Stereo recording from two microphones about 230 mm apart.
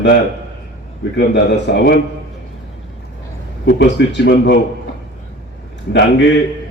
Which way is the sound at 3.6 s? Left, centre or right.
Left.